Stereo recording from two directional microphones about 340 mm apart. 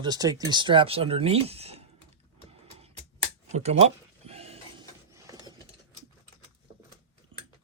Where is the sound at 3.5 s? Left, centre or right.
Centre.